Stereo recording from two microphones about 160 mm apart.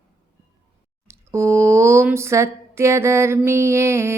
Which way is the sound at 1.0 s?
15° right (ahead or behind).